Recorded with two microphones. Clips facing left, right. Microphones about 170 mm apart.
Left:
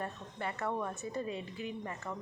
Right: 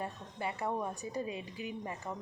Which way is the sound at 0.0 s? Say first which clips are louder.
Even; 10° right (ahead or behind).